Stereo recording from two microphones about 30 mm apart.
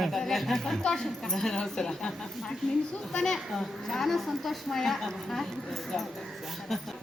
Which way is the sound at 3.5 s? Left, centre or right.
Centre.